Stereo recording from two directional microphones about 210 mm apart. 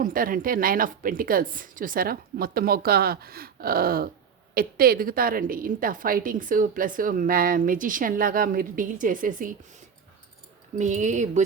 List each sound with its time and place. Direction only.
0.0 s a woman's voice: 40° right (ahead or behind)
10.8 s a woman's voice: 35° right (ahead or behind)